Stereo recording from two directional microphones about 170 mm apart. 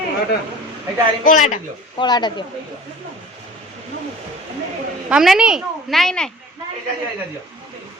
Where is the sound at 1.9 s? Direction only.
25° left (ahead or behind).